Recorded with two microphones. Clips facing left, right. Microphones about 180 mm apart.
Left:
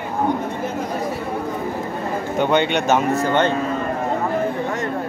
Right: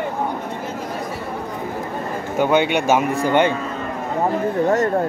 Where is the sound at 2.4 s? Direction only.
5° right (ahead or behind).